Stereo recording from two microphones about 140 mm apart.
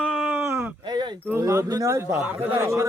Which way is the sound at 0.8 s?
30° right (ahead or behind).